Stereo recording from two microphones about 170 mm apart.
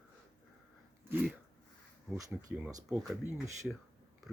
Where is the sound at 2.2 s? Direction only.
20° right (ahead or behind).